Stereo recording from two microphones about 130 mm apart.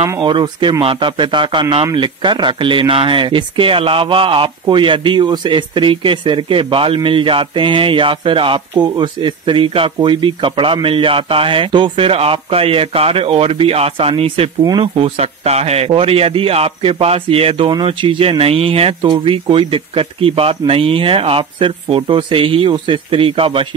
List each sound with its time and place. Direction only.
0.2 s speech: 40° right (ahead or behind)
14.6 s speech: 30° right (ahead or behind)
15.0 s speech: 50° right (ahead or behind)